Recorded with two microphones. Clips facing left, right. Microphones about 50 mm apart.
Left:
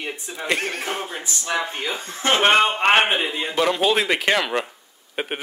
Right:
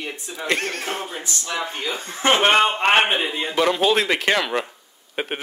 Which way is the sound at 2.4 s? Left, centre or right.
Centre.